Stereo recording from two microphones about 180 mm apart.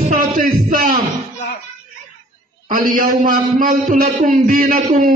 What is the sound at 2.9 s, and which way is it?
A man's voice, 50° right (ahead or behind).